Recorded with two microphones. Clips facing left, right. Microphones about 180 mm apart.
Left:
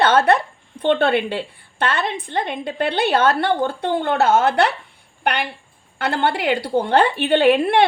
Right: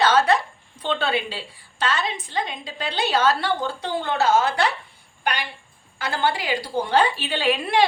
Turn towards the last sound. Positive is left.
turn(degrees=60)  # may be behind; listen again after turning